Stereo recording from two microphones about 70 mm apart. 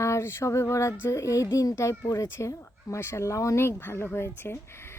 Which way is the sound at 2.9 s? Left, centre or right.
Left.